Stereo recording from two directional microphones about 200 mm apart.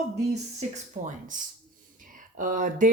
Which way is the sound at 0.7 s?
40° right (ahead or behind).